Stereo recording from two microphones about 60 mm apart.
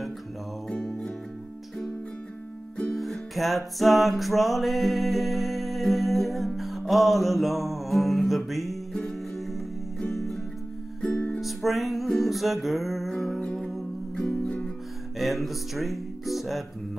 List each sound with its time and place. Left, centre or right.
0.7 s music: centre
2.9 s music: centre
11.3 s music: centre
14.4 s music: centre
15.1 s music: centre